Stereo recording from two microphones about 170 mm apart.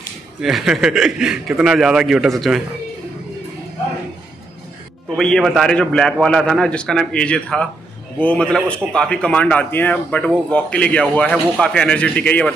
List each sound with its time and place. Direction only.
0.4 s a man's voice: centre (ahead or behind)
5.1 s a man's voice: centre (ahead or behind)